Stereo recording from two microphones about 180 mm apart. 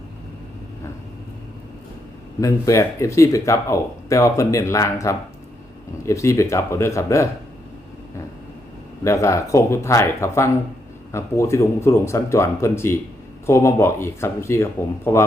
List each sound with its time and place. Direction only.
2.4 s speech: 15° left (ahead or behind)
9.0 s speech: 15° left (ahead or behind)